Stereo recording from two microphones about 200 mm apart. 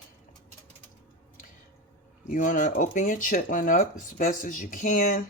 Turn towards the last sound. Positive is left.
turn(degrees=45)  # may be behind; listen again after turning